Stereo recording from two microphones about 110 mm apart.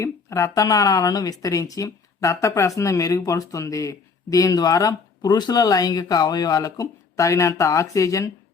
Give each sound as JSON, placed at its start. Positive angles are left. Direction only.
{"t": 0.0, "sound": "speech", "side_deg": 25}